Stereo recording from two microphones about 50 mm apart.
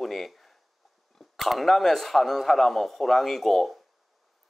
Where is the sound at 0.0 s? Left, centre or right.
Centre.